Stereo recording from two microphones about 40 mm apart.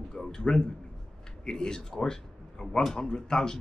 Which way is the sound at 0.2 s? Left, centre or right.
Centre.